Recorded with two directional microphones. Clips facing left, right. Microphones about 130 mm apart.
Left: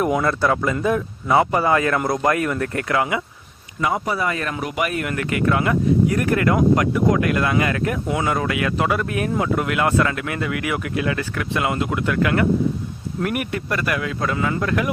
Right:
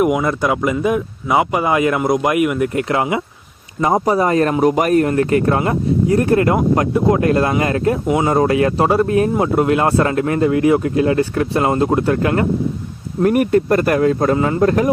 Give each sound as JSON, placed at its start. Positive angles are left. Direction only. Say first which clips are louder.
{"t": 0.0, "sound": "speech", "louder": "right 3 dB", "side_deg": -15}
{"t": 2.9, "sound": "speech", "louder": "even", "side_deg": -25}
{"t": 3.8, "sound": "speech", "louder": "right 7 dB", "side_deg": -35}